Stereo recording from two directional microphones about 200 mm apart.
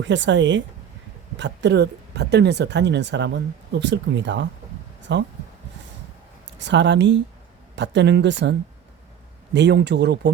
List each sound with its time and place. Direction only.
0.0 s speech: 65° right (ahead or behind)
6.6 s speech: 60° right (ahead or behind)